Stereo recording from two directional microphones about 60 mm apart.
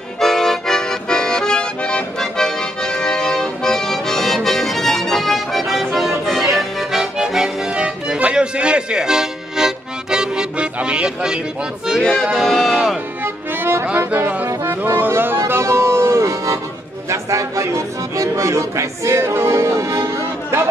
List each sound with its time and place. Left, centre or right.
0.2 s accordion: centre
12.0 s music: centre
12.4 s speech: centre
13.2 s music: right
13.9 s speech: right
14.5 s music: right
14.8 s music: right